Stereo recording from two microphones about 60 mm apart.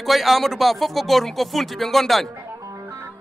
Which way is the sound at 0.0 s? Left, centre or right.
Centre.